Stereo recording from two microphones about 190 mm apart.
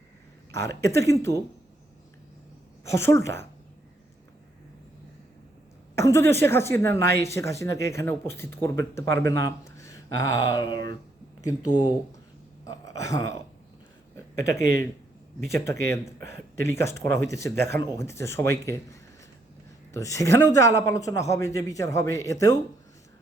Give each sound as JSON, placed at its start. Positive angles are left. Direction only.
{"t": 0.5, "sound": "speech", "side_deg": 15}
{"t": 3.0, "sound": "speech", "side_deg": 15}
{"t": 6.0, "sound": "speech", "side_deg": 15}
{"t": 12.6, "sound": "speech", "side_deg": 15}
{"t": 14.3, "sound": "speech", "side_deg": 15}
{"t": 19.9, "sound": "speech", "side_deg": 15}